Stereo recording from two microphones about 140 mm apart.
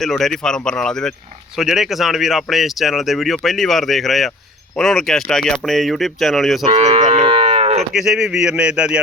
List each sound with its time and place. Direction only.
0.0 s speech: 5° left (ahead or behind)
6.9 s moo: 35° right (ahead or behind)
7.9 s speech: 5° right (ahead or behind)